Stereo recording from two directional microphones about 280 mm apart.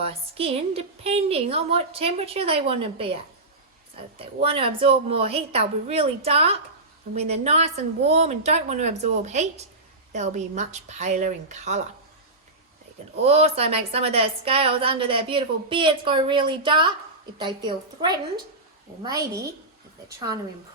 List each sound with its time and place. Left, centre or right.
0.0 s a woman's voice: right
4.2 s a woman's voice: centre
13.2 s a woman's voice: right